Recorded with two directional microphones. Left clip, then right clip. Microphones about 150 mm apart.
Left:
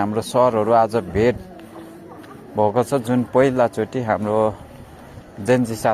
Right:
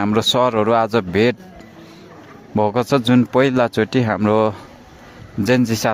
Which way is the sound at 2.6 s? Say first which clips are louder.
Right 1 dB; 55° right (ahead or behind).